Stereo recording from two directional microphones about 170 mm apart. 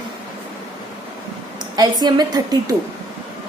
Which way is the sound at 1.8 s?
25° right (ahead or behind).